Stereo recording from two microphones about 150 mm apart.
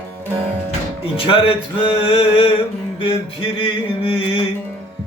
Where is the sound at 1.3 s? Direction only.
35° left (ahead or behind).